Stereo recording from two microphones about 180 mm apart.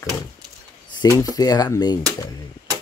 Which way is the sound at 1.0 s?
20° left (ahead or behind).